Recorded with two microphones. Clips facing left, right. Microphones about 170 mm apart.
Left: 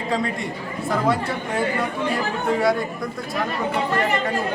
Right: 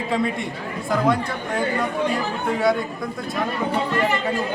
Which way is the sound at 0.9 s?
5° left (ahead or behind).